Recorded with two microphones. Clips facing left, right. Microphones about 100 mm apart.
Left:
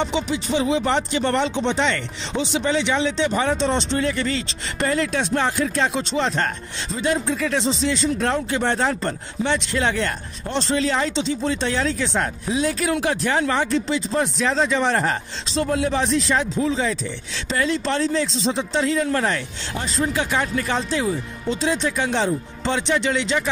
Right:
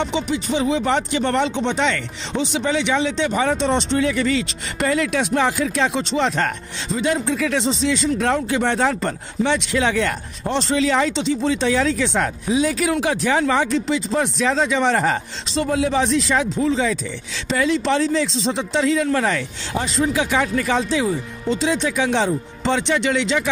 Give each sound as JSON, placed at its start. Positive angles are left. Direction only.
{"t": 0.1, "sound": "a man's voice", "side_deg": -50}
{"t": 11.6, "sound": "a man's voice", "side_deg": -75}